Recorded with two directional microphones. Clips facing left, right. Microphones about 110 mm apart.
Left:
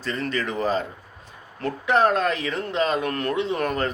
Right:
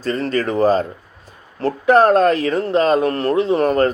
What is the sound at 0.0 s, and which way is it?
Speech, 40° right (ahead or behind).